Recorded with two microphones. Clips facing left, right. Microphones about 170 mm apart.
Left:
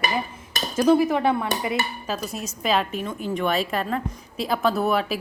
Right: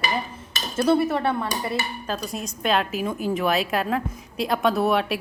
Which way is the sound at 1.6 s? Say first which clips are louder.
Left 1 dB; 10° left (ahead or behind).